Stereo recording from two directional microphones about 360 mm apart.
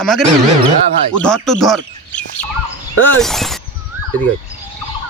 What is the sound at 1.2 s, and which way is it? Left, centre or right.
Speech, centre.